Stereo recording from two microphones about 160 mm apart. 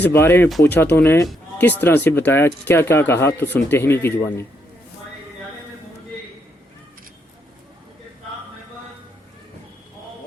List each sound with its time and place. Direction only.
0.1 s speech: 15° left (ahead or behind)